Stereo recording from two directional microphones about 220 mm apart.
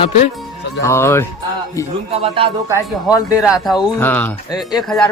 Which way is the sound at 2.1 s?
25° right (ahead or behind).